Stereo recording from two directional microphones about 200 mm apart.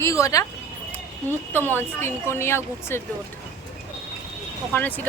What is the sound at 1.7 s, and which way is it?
Speech, 10° left (ahead or behind).